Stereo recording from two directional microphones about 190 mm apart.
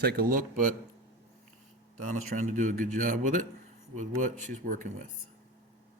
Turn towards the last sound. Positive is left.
turn(degrees=-45)  # may be behind; listen again after turning